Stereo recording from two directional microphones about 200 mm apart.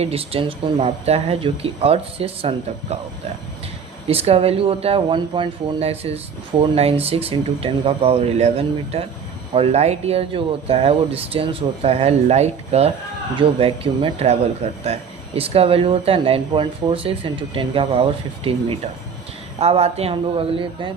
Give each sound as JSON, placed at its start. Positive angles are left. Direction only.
{"t": 0.0, "sound": "speech", "side_deg": -30}
{"t": 4.1, "sound": "speech", "side_deg": -30}